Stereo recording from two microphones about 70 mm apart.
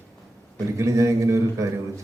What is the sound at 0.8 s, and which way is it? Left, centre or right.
Speech, right.